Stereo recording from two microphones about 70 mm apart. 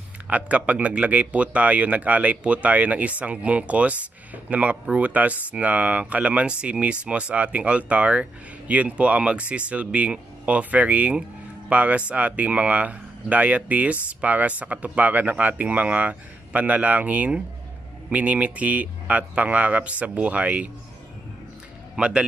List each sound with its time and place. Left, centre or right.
0.3 s speech: centre
21.9 s a man's voice: centre